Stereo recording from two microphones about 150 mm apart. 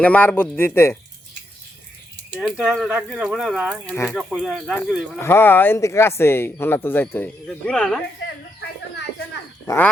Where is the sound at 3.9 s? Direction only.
15° left (ahead or behind).